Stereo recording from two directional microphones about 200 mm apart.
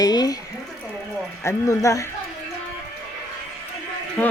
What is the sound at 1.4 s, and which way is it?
Speech, 15° left (ahead or behind).